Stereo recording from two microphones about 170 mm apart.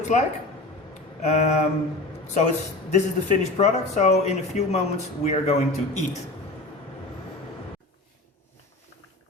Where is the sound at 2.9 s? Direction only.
40° left (ahead or behind).